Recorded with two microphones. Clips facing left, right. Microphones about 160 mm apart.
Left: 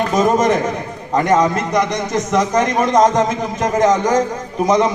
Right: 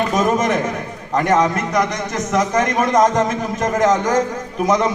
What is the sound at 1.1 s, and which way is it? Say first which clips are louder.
A man's voice: left 2 dB; 20° left (ahead or behind).